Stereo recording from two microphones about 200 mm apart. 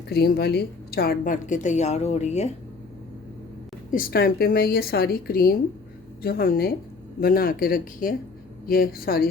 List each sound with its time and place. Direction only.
0.1 s a woman's voice: 50° left (ahead or behind); by 2.5 s 35° left (ahead or behind)
3.9 s speech: 45° left (ahead or behind)